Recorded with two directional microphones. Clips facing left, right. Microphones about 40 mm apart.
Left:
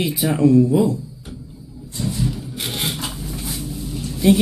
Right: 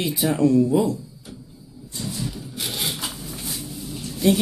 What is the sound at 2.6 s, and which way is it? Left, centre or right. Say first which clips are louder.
Wood: left 2 dB; left.